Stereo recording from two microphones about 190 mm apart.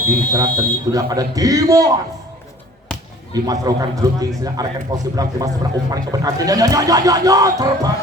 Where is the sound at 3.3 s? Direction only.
20° right (ahead or behind).